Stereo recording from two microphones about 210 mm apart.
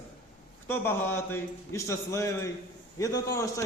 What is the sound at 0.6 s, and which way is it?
A man's voice, 10° left (ahead or behind).